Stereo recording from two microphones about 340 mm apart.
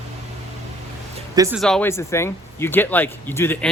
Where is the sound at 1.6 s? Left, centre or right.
Centre.